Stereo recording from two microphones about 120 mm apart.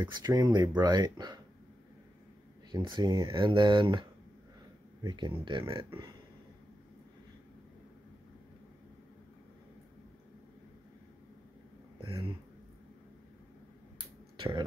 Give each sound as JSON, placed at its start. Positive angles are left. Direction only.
{"t": 0.0, "sound": "speech", "side_deg": -35}
{"t": 2.7, "sound": "speech", "side_deg": -35}
{"t": 12.0, "sound": "speech", "side_deg": -45}
{"t": 14.3, "sound": "a sound", "side_deg": -40}